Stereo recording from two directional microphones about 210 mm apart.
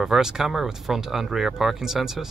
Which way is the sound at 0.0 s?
Centre (ahead or behind).